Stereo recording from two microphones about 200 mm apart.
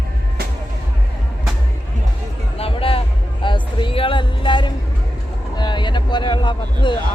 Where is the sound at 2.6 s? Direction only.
30° left (ahead or behind).